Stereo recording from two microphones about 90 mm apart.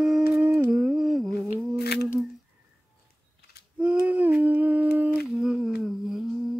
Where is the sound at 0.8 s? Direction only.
5° right (ahead or behind).